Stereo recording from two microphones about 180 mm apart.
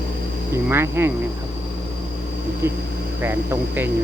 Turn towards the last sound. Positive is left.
turn(degrees=-10)  # may be behind; listen again after turning